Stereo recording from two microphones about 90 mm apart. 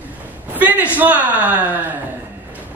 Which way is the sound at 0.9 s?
20° right (ahead or behind).